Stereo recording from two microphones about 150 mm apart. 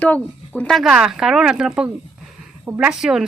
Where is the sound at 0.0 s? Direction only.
10° left (ahead or behind).